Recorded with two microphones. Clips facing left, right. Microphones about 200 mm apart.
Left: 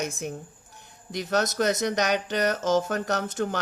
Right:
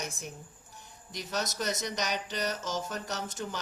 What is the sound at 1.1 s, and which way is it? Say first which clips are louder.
Speech: left 9 dB; 60° left (ahead or behind).